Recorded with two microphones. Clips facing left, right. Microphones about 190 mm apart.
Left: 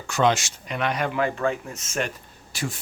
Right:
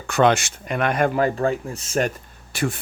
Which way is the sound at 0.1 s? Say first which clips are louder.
Right 4 dB; 60° right (ahead or behind).